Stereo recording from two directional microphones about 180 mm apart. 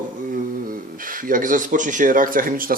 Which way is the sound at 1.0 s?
50° right (ahead or behind).